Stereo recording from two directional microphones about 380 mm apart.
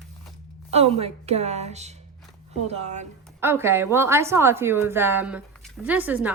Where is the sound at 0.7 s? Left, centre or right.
Centre.